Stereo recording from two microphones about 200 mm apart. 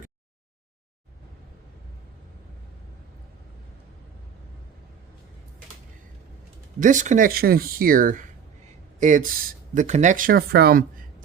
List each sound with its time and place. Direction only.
6.7 s speech: 40° right (ahead or behind)